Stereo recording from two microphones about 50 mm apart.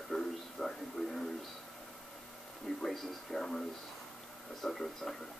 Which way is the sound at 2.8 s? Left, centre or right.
Centre.